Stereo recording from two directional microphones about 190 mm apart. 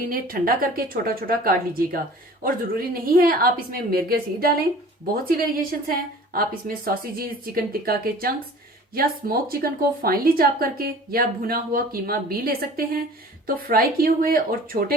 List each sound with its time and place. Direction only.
0.1 s speech: 50° right (ahead or behind)